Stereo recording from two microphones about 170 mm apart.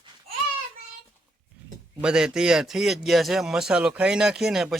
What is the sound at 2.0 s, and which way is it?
Speech, 5° right (ahead or behind).